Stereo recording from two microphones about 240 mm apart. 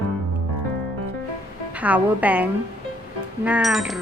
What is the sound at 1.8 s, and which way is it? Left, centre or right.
A woman's voice, centre.